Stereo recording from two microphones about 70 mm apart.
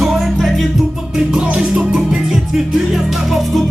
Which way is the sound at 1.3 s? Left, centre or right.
Centre.